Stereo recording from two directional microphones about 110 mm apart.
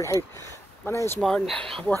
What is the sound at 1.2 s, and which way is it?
Speech, 5° left (ahead or behind).